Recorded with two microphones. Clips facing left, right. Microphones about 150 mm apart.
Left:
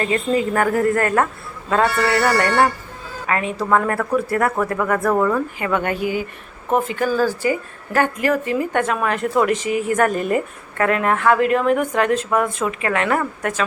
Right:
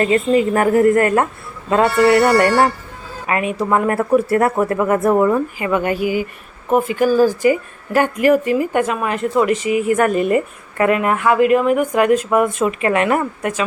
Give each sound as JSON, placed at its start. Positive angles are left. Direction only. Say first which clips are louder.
{"t": 0.5, "sound": "speech", "louder": "right 6 dB", "side_deg": -25}
{"t": 5.5, "sound": "a woman's voice", "louder": "right 3 dB", "side_deg": -5}